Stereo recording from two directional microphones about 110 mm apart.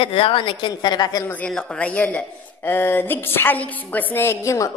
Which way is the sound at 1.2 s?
15° left (ahead or behind).